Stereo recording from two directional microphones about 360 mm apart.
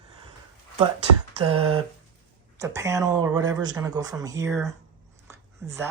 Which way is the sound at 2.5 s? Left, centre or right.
Centre.